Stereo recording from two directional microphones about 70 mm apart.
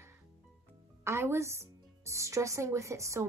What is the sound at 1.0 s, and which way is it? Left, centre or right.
A woman's voice, right.